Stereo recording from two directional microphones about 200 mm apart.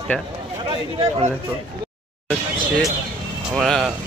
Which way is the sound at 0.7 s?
25° right (ahead or behind).